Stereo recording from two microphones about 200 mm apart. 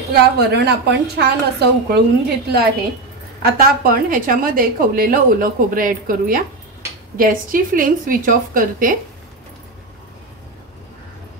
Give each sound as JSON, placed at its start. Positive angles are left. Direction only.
{"t": 0.1, "sound": "a woman's voice", "side_deg": -55}